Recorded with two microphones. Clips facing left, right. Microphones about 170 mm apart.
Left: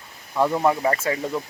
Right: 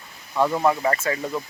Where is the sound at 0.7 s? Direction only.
25° left (ahead or behind).